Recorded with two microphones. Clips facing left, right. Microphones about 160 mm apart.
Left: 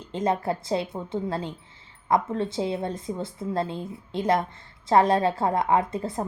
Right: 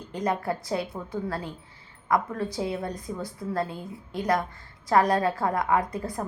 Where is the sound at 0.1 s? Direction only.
25° left (ahead or behind).